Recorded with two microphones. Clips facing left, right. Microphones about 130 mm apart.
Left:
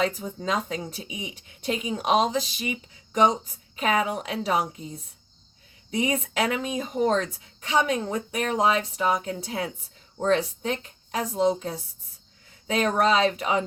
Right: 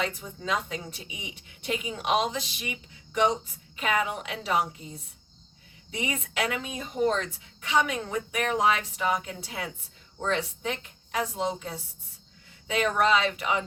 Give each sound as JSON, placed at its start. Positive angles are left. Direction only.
{"t": 0.0, "sound": "a woman's voice", "side_deg": 40}
{"t": 5.9, "sound": "a woman's voice", "side_deg": 40}